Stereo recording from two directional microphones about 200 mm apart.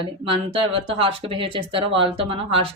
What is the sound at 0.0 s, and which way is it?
Speech, 25° right (ahead or behind).